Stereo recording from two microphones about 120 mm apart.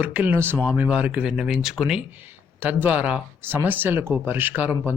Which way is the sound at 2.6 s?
15° right (ahead or behind).